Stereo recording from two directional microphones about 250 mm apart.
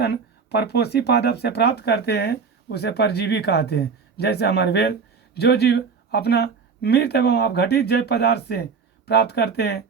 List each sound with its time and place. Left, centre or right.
0.0 s speech: left